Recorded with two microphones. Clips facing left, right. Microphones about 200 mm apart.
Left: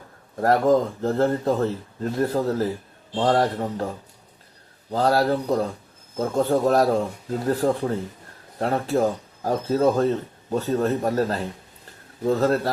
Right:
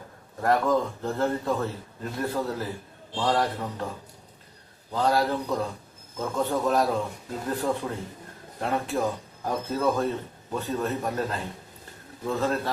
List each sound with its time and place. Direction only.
0.3 s a man's voice: 40° left (ahead or behind)
4.9 s a man's voice: 40° left (ahead or behind)